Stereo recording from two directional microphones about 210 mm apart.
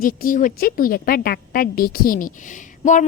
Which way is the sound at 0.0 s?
40° left (ahead or behind).